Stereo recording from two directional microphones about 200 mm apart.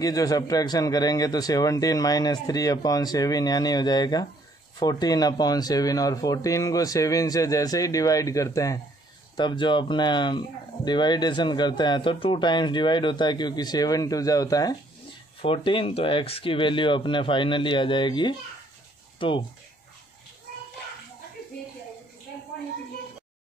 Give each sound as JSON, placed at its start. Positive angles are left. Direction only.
{"t": 0.0, "sound": "a man's voice", "side_deg": 20}